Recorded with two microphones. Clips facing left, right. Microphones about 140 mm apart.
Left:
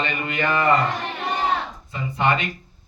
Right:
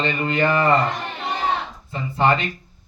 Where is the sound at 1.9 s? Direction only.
35° right (ahead or behind).